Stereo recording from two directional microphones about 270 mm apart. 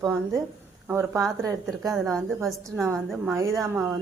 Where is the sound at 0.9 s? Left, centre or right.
Centre.